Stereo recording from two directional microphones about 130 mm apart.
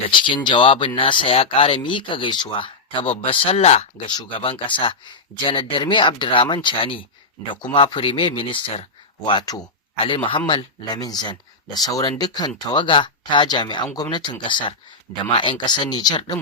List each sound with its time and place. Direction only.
0.1 s speech: 40° left (ahead or behind)
4.0 s speech: 35° left (ahead or behind)